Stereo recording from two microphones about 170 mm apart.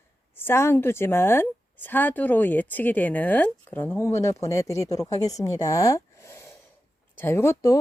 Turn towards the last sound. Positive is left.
turn(degrees=20)  # may be behind; listen again after turning